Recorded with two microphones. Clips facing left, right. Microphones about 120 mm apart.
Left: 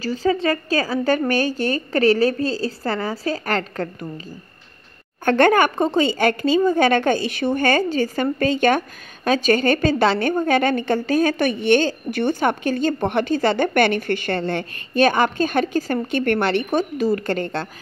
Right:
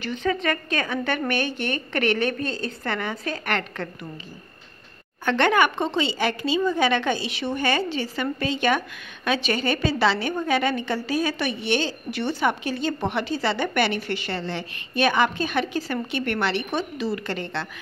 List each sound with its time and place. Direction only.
0.0 s a woman's voice: 35° left (ahead or behind)
5.2 s speech: 45° left (ahead or behind)